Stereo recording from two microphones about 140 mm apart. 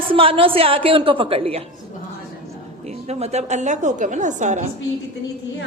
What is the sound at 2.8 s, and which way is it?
A woman's voice, 50° right (ahead or behind).